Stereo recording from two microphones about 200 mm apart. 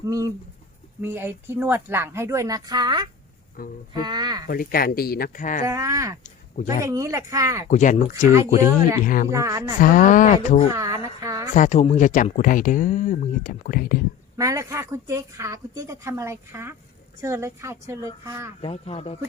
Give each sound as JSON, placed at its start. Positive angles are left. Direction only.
{"t": 0.0, "sound": "a woman's voice", "side_deg": -15}
{"t": 3.6, "sound": "speech", "side_deg": 45}
{"t": 3.9, "sound": "speech", "side_deg": -20}
{"t": 4.4, "sound": "speech", "side_deg": 45}
{"t": 5.6, "sound": "a woman's voice", "side_deg": -15}
{"t": 7.7, "sound": "speech", "side_deg": 40}
{"t": 9.3, "sound": "a woman's voice", "side_deg": -15}
{"t": 9.8, "sound": "speech", "side_deg": 40}
{"t": 10.8, "sound": "a sound", "side_deg": -15}
{"t": 11.5, "sound": "speech", "side_deg": 35}
{"t": 14.3, "sound": "a woman's voice", "side_deg": -15}
{"t": 18.6, "sound": "speech", "side_deg": 30}